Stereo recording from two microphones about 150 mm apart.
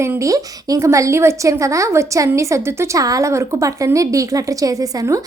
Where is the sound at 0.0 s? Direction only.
20° right (ahead or behind).